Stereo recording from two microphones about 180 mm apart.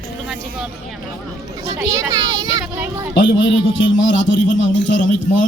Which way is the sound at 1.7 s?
20° right (ahead or behind).